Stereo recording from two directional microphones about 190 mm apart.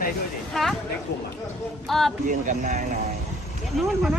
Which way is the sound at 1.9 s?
Centre (ahead or behind).